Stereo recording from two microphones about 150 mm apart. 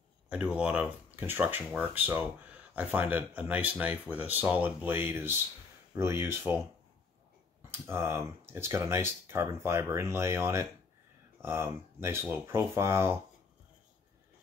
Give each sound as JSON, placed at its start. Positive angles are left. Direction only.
{"t": 0.3, "sound": "speech", "side_deg": -5}
{"t": 7.7, "sound": "speech", "side_deg": -15}